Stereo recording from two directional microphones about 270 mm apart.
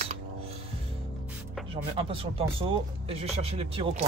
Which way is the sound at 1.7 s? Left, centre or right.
Centre.